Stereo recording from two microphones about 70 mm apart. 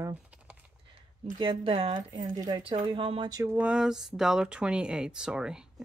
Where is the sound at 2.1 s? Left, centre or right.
Right.